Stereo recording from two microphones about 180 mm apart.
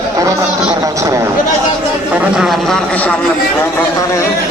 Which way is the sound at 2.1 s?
5° right (ahead or behind).